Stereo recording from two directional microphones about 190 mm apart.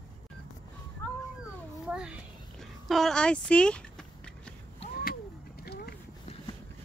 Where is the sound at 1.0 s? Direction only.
10° left (ahead or behind).